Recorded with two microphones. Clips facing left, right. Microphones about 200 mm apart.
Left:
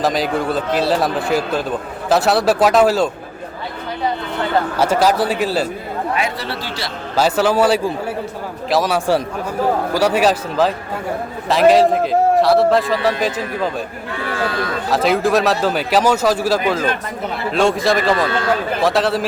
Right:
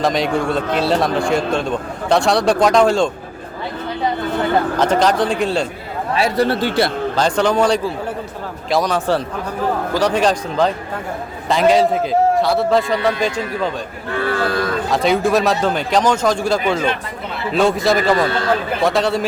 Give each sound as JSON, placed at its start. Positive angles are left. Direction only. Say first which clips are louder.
{"t": 0.0, "sound": "a man's voice", "louder": "right 1 dB", "side_deg": 0}
{"t": 4.8, "sound": "a man's voice", "louder": "left 2 dB", "side_deg": 10}
{"t": 6.1, "sound": "a man's voice", "louder": "right 6 dB", "side_deg": -40}
{"t": 7.2, "sound": "a man's voice", "louder": "left 2 dB", "side_deg": 5}
{"t": 14.8, "sound": "a man's voice", "louder": "left 1 dB", "side_deg": 0}